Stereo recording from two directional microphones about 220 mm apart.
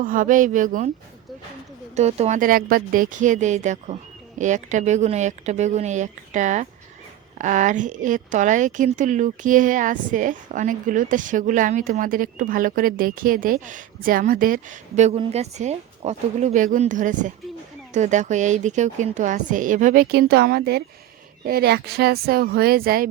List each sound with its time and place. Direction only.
0.0 s speech: 40° right (ahead or behind)
2.0 s speech: 30° right (ahead or behind)